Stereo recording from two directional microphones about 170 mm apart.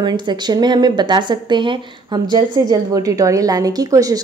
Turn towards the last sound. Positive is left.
turn(degrees=-20)  # may be behind; listen again after turning